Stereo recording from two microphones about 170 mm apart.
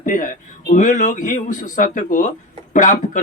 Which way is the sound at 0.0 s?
50° left (ahead or behind).